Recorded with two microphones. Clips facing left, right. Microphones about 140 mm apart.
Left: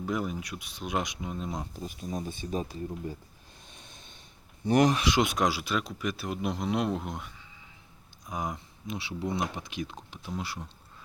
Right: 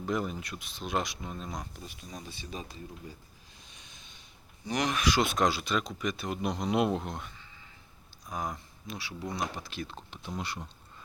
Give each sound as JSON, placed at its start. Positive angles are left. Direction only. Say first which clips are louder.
{"t": 0.0, "sound": "speech", "louder": "left 1 dB", "side_deg": 10}
{"t": 1.7, "sound": "speech", "louder": "left 9 dB", "side_deg": 45}
{"t": 4.6, "sound": "speech", "louder": "left 9 dB", "side_deg": 55}
{"t": 4.9, "sound": "speech", "louder": "left 2 dB", "side_deg": 25}
{"t": 8.3, "sound": "speech", "louder": "left 2 dB", "side_deg": 20}